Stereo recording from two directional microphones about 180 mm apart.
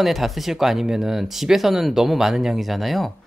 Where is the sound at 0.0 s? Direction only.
Centre (ahead or behind).